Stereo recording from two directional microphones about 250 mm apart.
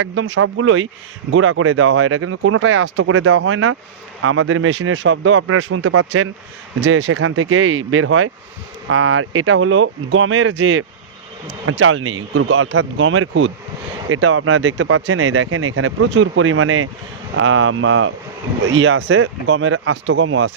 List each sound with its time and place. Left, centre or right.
0.0 s speech: right